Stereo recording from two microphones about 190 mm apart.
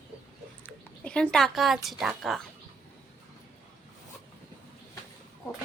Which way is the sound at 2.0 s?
Centre (ahead or behind).